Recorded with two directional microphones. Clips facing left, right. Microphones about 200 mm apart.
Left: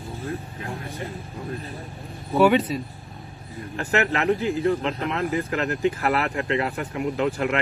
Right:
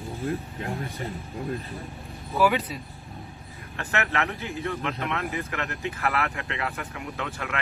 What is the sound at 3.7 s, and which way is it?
Speech, 30° left (ahead or behind).